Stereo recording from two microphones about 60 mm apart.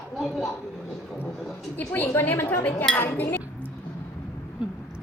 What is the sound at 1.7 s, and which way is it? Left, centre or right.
Speech, left.